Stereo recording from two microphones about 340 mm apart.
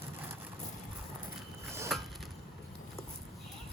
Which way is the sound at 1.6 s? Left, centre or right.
Centre.